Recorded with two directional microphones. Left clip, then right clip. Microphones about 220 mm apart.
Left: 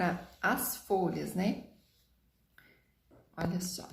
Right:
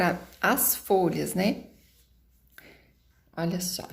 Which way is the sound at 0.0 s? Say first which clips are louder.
Right 7 dB; 35° right (ahead or behind).